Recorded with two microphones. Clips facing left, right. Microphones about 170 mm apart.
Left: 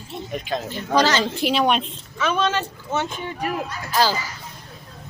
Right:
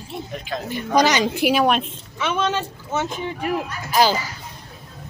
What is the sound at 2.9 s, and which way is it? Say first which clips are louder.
Speech: right 1 dB; centre (ahead or behind).